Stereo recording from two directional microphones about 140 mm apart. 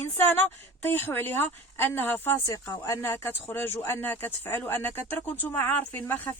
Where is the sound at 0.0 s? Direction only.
15° left (ahead or behind).